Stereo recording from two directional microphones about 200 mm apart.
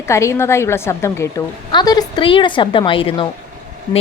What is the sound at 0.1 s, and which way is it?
A woman's voice, 15° left (ahead or behind).